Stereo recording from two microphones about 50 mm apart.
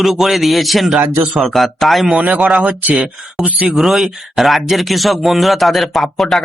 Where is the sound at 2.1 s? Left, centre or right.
Right.